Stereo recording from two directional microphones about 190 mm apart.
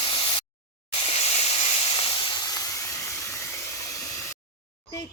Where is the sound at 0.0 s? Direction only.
25° left (ahead or behind).